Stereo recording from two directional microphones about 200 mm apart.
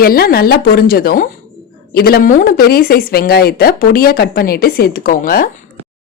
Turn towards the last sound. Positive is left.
turn(degrees=45)  # may be behind; listen again after turning